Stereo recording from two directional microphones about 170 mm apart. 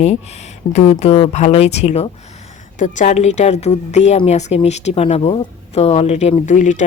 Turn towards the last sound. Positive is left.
turn(degrees=45)  # may be behind; listen again after turning